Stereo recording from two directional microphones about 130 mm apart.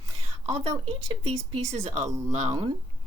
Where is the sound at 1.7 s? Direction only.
55° right (ahead or behind).